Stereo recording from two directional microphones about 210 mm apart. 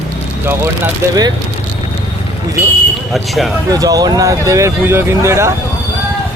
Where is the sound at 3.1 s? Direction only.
Centre (ahead or behind).